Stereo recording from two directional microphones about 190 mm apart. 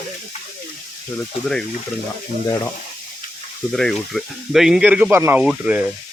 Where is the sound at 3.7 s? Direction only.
Centre (ahead or behind).